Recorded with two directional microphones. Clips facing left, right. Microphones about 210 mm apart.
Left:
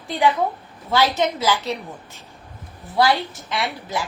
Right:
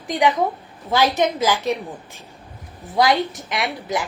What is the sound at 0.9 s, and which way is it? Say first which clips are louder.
Speech: right 1 dB; 20° right (ahead or behind).